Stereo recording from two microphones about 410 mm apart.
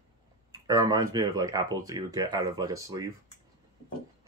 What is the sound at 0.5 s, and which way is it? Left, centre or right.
Speech, centre.